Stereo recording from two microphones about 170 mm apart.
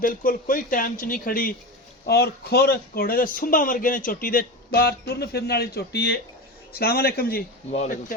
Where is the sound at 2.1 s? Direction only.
70° left (ahead or behind).